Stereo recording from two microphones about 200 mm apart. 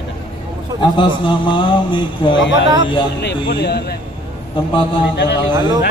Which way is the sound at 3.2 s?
55° left (ahead or behind).